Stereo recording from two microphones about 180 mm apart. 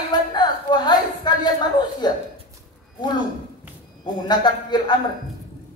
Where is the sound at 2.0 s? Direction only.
25° left (ahead or behind).